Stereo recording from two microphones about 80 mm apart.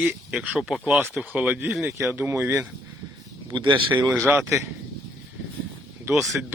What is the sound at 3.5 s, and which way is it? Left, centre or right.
Speech, right.